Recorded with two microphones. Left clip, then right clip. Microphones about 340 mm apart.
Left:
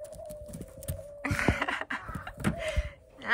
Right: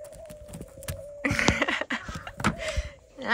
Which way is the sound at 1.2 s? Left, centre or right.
Centre.